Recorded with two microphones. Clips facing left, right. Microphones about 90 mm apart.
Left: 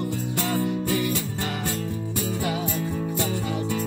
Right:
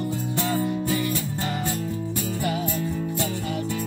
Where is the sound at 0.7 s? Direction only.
15° left (ahead or behind).